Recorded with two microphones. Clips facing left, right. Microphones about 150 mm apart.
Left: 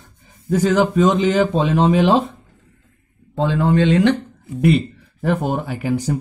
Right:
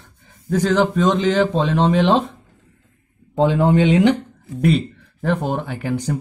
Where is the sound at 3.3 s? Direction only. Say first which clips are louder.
Right 2 dB; 20° right (ahead or behind).